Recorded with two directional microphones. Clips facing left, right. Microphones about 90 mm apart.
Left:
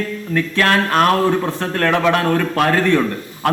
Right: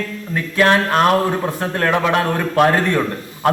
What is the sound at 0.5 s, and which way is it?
A man's voice, 20° right (ahead or behind).